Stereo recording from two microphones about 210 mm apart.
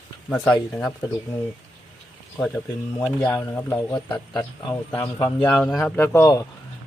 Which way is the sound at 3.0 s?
10° left (ahead or behind).